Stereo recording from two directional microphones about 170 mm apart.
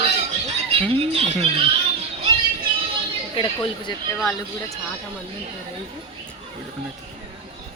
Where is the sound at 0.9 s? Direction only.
35° right (ahead or behind).